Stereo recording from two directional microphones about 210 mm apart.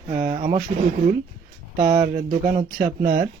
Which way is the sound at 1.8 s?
50° right (ahead or behind).